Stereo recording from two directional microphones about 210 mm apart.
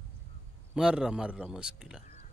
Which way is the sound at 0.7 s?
5° right (ahead or behind).